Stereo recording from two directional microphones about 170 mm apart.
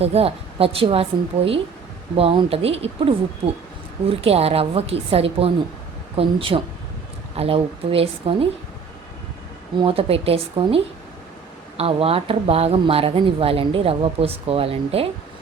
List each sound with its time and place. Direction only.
0.0 s speech: 35° right (ahead or behind)
2.1 s speech: 30° right (ahead or behind)
9.8 s speech: 35° right (ahead or behind)